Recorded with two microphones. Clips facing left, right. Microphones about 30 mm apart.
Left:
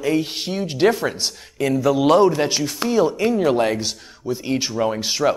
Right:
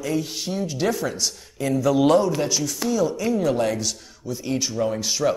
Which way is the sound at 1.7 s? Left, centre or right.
Left.